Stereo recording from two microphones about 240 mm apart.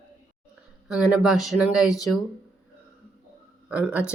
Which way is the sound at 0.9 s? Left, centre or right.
Centre.